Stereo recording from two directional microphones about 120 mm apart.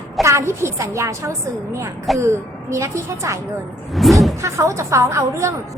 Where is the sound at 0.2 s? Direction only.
25° right (ahead or behind).